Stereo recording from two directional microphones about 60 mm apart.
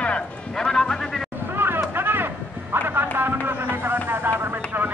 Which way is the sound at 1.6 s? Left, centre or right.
Right.